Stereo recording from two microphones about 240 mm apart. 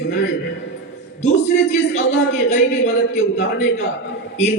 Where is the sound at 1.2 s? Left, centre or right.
Left.